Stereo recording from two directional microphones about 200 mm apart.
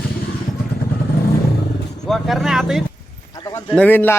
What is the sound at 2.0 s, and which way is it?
Vehicle, centre (ahead or behind).